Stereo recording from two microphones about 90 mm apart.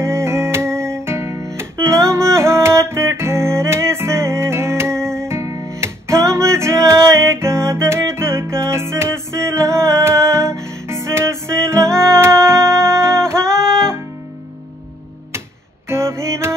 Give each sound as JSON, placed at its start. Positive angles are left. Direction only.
{"t": 0.0, "sound": "music", "side_deg": -30}
{"t": 13.5, "sound": "music", "side_deg": 5}
{"t": 15.9, "sound": "music", "side_deg": -30}